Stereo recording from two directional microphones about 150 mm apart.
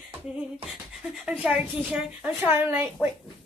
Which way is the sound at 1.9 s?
15° right (ahead or behind).